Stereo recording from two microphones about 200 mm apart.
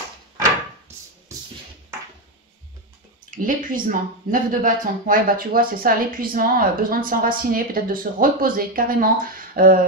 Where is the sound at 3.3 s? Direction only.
40° right (ahead or behind).